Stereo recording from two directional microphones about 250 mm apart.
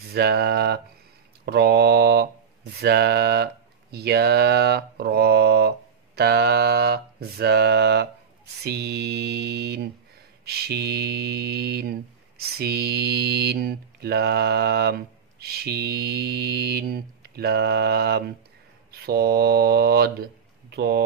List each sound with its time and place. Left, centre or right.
0.1 s mantra: right
20.7 s speech: right